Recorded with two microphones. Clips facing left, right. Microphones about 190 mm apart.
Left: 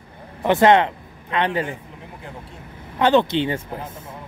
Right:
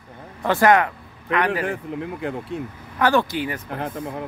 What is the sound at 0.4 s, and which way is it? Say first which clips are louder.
A man's voice: left 2 dB; 20° left (ahead or behind).